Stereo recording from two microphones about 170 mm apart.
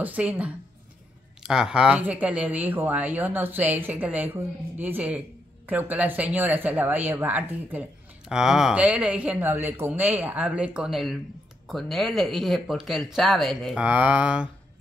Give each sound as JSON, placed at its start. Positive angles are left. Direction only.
{"t": 0.0, "sound": "speech", "side_deg": -10}